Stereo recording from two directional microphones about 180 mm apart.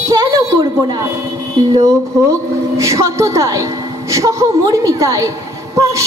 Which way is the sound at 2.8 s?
15° right (ahead or behind).